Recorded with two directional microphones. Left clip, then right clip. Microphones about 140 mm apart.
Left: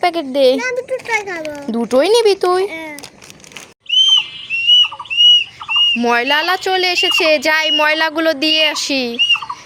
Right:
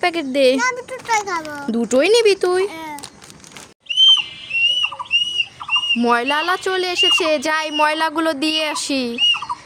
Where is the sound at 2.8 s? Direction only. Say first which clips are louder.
Left 1 dB; 10° right (ahead or behind).